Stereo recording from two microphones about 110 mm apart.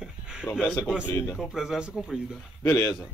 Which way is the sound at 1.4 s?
5° right (ahead or behind).